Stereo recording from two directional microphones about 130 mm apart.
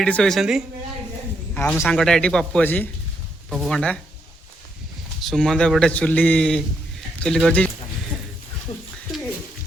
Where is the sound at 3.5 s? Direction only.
Centre (ahead or behind).